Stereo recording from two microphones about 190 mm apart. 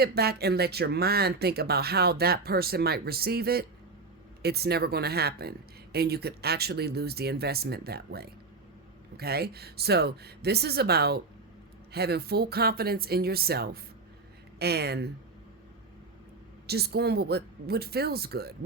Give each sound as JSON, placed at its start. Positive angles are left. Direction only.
{"t": 0.0, "sound": "speech", "side_deg": -55}
{"t": 16.6, "sound": "speech", "side_deg": -55}